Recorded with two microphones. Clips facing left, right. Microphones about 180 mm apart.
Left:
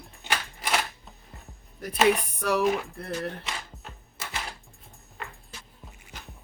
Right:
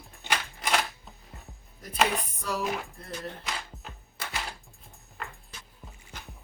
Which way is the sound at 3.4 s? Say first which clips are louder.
Even; centre (ahead or behind).